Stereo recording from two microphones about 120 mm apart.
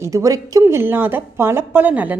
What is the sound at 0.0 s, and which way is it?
Speech, 25° right (ahead or behind).